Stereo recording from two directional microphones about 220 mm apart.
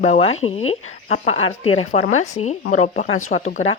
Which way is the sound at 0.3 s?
70° left (ahead or behind).